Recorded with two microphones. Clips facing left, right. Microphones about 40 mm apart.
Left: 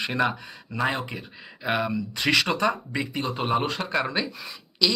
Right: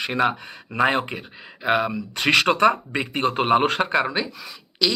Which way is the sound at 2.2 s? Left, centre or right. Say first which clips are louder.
Right 6 dB; right.